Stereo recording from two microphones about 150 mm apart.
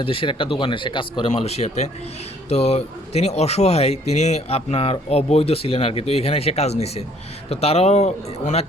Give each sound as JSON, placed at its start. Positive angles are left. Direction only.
{"t": 0.0, "sound": "speech", "side_deg": 35}
{"t": 1.3, "sound": "speech", "side_deg": 45}